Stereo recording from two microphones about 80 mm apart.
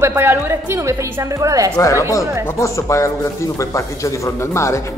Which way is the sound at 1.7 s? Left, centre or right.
Left.